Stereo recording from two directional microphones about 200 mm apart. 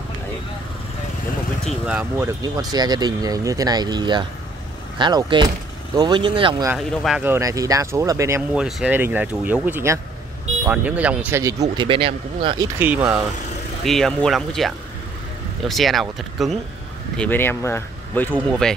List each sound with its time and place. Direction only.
1.7 s speech: 5° right (ahead or behind); by 6.7 s 25° right (ahead or behind)
7.0 s speech: 5° right (ahead or behind)
11.7 s speech: 25° right (ahead or behind)
12.7 s speech: 10° right (ahead or behind)
13.8 s speech: centre (ahead or behind)